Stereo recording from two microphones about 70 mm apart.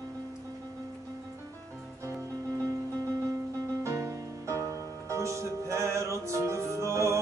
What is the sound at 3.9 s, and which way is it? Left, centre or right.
Music, right.